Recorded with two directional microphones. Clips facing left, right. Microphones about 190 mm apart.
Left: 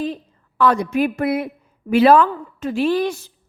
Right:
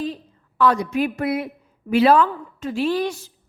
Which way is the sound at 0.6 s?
55° left (ahead or behind).